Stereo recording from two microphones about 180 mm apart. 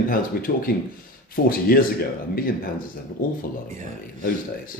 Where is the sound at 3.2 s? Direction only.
50° left (ahead or behind).